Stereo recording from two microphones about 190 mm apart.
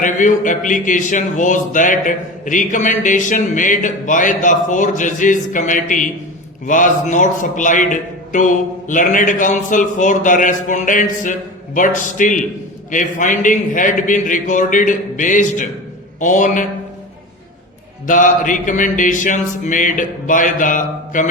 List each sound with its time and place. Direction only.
0.0 s a man's voice: 40° left (ahead or behind)
18.0 s speech: 40° left (ahead or behind)